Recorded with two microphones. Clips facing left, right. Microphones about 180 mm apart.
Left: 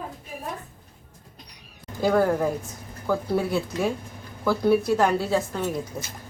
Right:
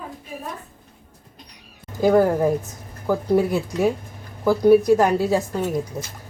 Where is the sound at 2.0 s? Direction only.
20° right (ahead or behind).